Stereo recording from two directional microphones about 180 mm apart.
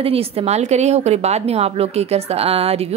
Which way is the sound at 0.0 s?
30° right (ahead or behind).